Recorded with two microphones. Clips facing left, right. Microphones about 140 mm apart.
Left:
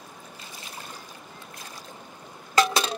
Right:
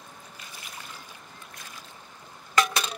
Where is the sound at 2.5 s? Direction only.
30° left (ahead or behind).